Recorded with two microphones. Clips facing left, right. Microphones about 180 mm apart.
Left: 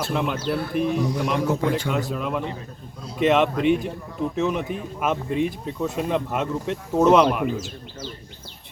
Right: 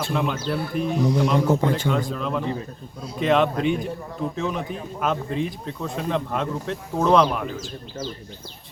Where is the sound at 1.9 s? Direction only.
5° left (ahead or behind).